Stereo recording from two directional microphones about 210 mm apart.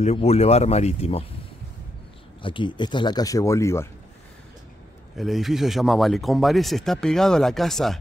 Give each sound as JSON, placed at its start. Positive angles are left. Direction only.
{"t": 0.0, "sound": "speech", "side_deg": 30}
{"t": 2.4, "sound": "speech", "side_deg": 25}
{"t": 5.1, "sound": "speech", "side_deg": 0}